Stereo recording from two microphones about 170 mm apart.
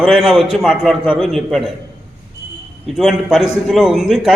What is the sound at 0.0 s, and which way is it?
A man's voice, centre (ahead or behind).